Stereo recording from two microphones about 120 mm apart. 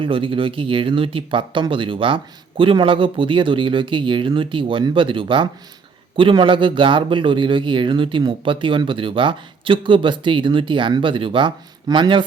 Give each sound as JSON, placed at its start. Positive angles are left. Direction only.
{"t": 0.0, "sound": "a man's voice", "side_deg": -45}